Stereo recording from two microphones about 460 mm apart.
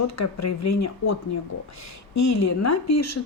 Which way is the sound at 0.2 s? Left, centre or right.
Left.